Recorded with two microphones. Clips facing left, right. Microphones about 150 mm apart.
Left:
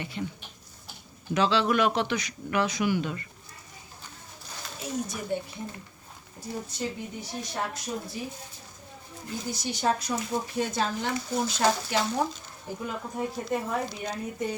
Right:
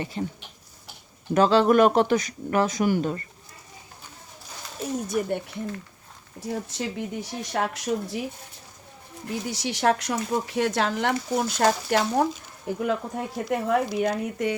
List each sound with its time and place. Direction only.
0.0 s speech: 35° right (ahead or behind)
1.3 s speech: 45° right (ahead or behind)
4.8 s speech: 55° right (ahead or behind)
6.7 s speech: 90° right
9.3 s speech: 90° right; by 12.3 s 55° right (ahead or behind)
12.7 s speech: 70° right (ahead or behind)